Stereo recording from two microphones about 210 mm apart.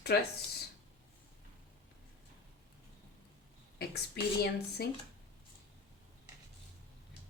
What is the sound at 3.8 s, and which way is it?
Speech, 50° left (ahead or behind).